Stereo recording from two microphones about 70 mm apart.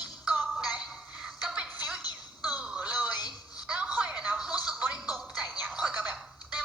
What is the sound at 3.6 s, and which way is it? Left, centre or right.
Music, centre.